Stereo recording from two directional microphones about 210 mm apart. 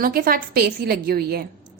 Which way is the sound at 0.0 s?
45° right (ahead or behind).